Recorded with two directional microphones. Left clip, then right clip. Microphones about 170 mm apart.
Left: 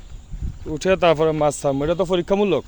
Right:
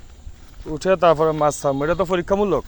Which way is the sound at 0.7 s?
25° left (ahead or behind).